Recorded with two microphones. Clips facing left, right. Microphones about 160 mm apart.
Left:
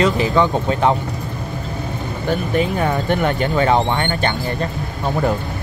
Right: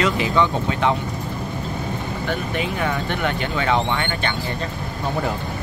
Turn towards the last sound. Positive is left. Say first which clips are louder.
# left 4 dB
turn(degrees=40)  # may be behind; listen again after turning